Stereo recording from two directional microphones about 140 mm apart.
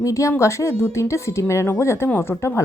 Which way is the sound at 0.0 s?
20° left (ahead or behind).